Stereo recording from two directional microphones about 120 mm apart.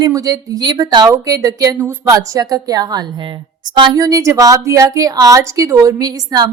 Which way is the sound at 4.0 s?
30° right (ahead or behind).